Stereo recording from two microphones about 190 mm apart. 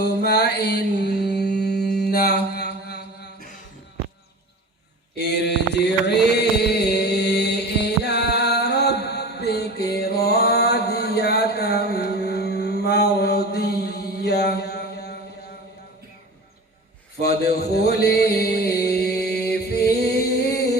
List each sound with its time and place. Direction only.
0.0 s mantra: 60° left (ahead or behind)
5.1 s mantra: 60° left (ahead or behind)
17.2 s a sound: 60° left (ahead or behind)